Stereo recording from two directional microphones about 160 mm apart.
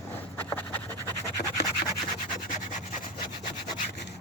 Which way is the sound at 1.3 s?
80° left.